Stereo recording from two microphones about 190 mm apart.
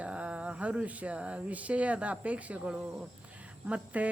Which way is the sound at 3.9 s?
5° right (ahead or behind).